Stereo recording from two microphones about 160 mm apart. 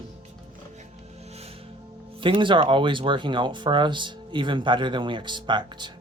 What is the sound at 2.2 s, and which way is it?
Speech, 30° right (ahead or behind).